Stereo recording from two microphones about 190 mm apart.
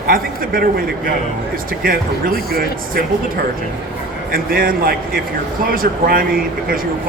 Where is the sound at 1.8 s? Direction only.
50° right (ahead or behind).